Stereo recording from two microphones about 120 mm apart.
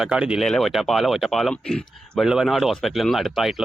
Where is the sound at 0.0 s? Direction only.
5° right (ahead or behind).